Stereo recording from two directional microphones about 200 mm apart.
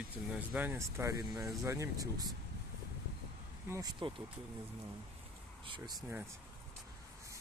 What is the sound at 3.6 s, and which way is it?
Speech, 15° right (ahead or behind).